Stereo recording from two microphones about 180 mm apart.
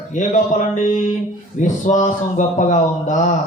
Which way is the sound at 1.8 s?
45° left (ahead or behind).